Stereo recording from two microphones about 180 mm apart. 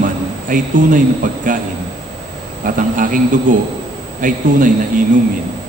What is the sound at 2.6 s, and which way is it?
A man's voice, 50° right (ahead or behind).